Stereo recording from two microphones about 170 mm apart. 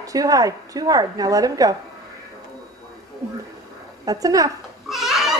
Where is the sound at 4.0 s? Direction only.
20° right (ahead or behind).